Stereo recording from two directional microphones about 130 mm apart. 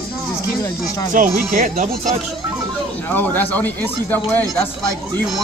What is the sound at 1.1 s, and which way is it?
Speech, 90° right.